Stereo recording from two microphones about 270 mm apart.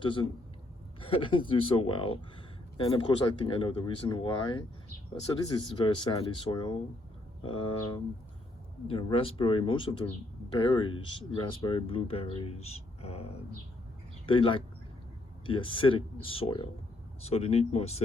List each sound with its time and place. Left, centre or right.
0.0 s speech: centre